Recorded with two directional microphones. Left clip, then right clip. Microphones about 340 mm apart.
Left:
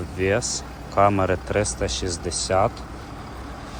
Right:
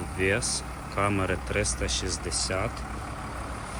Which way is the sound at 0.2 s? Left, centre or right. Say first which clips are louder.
Left 4 dB; centre.